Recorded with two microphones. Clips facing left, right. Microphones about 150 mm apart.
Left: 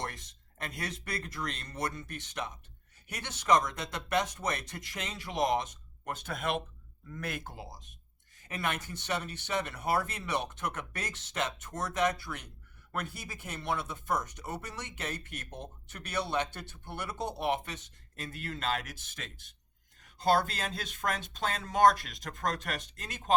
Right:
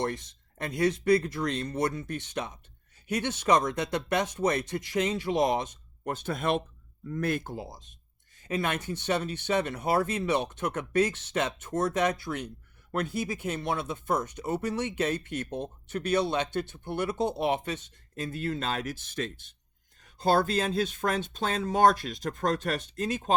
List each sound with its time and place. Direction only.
0.0 s speech: 25° right (ahead or behind)
18.3 s speech: 30° right (ahead or behind)